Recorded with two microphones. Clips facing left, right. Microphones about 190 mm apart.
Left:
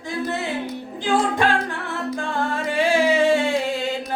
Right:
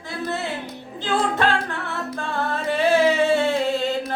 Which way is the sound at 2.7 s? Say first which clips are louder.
Right 1 dB; 10° left (ahead or behind).